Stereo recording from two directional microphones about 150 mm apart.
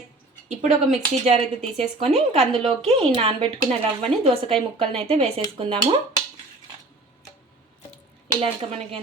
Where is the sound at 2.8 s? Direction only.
40° right (ahead or behind).